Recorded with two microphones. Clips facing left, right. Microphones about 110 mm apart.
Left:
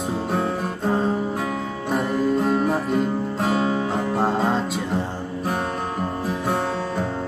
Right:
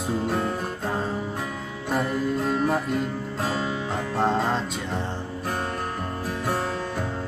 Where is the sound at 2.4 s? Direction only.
Centre (ahead or behind).